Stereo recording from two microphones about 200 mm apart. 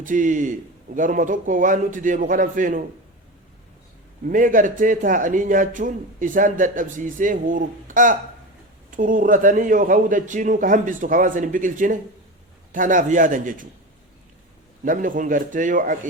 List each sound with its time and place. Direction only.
0.0 s a man's voice: 40° right (ahead or behind)
4.3 s a man's voice: 40° right (ahead or behind)
14.8 s a man's voice: 40° right (ahead or behind)